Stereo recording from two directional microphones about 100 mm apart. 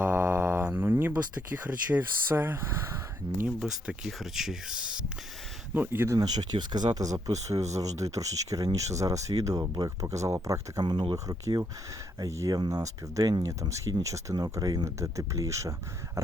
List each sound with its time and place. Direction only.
0.0 s speech: 20° right (ahead or behind)
3.6 s speech: 5° right (ahead or behind)
5.7 s speech: 20° right (ahead or behind)
6.1 s speech: 45° right (ahead or behind)